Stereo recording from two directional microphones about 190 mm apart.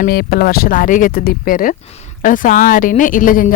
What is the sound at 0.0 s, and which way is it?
A woman's voice, 55° left (ahead or behind).